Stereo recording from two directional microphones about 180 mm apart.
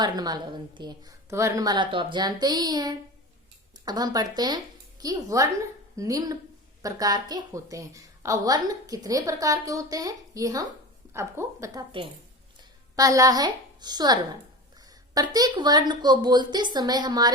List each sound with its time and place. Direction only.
0.0 s a woman's voice: 20° right (ahead or behind)